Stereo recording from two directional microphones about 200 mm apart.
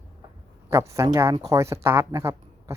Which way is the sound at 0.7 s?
15° right (ahead or behind).